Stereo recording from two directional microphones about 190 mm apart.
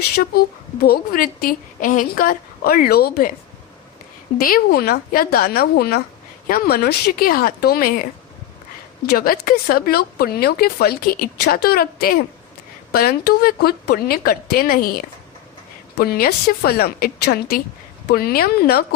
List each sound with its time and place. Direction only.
0.3 s speech: 55° left (ahead or behind)
4.4 s speech: 50° left (ahead or behind)
9.0 s speech: 50° left (ahead or behind)